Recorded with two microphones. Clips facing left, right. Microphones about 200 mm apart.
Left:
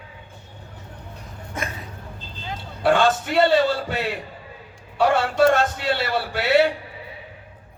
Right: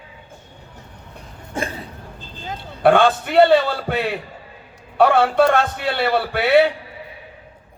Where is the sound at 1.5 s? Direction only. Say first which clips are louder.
Right 5 dB; 30° right (ahead or behind).